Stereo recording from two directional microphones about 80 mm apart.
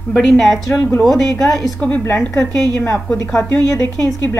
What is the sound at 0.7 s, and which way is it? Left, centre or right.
Speech, left.